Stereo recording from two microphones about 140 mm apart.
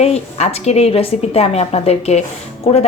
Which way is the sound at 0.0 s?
50° left (ahead or behind).